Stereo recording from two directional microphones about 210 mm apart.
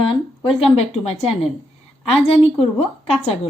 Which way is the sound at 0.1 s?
25° left (ahead or behind).